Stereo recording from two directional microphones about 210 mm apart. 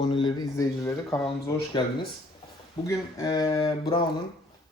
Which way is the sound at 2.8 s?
15° left (ahead or behind).